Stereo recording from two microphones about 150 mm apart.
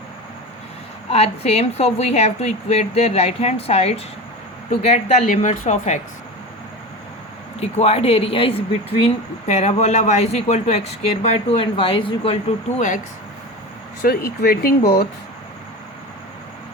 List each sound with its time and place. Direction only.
1.1 s speech: 45° left (ahead or behind)
7.6 s speech: 45° left (ahead or behind)
14.0 s speech: 75° left (ahead or behind)
14.4 s speech: 90° left